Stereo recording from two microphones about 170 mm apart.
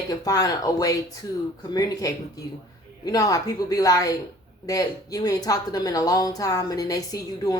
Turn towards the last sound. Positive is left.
turn(degrees=20)  # may be behind; listen again after turning